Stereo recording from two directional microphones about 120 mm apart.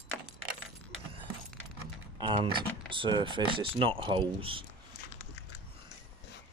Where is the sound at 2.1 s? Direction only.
45° right (ahead or behind).